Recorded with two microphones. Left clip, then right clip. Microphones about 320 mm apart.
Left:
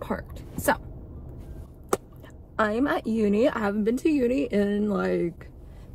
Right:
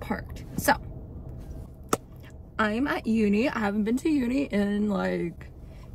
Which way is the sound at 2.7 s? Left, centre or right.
Centre.